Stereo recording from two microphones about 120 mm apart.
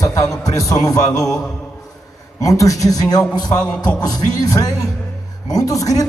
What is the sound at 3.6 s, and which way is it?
Speech, 10° left (ahead or behind).